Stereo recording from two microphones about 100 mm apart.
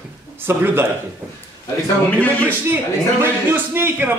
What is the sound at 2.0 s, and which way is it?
Speech, 15° left (ahead or behind).